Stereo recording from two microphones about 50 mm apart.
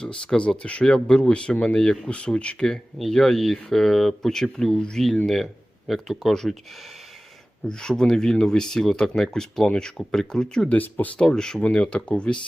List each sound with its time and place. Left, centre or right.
0.0 s speech: centre
3.0 s speech: centre
5.0 s speech: centre
7.7 s speech: centre
10.7 s speech: left
11.2 s speech: centre